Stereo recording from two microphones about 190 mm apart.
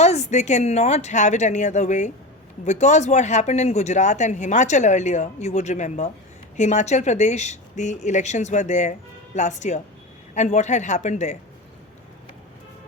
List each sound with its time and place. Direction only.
0.0 s speech: 35° left (ahead or behind)